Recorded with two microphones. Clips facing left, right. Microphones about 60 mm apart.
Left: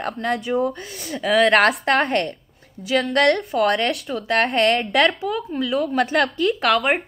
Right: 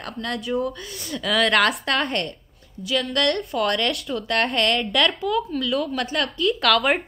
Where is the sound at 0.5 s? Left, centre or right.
Centre.